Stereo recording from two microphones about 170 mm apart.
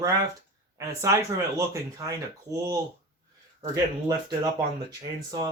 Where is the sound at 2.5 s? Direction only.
25° right (ahead or behind).